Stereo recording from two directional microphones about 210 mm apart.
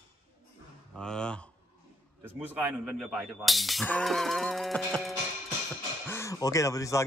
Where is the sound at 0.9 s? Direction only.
5° left (ahead or behind).